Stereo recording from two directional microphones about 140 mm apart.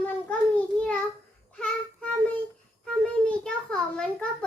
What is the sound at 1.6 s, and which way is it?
Child singing, 5° left (ahead or behind).